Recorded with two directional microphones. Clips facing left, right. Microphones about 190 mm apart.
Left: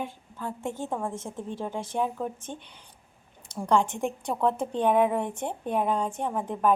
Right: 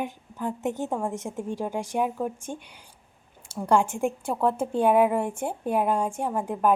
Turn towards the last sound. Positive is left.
turn(degrees=-10)  # may be behind; listen again after turning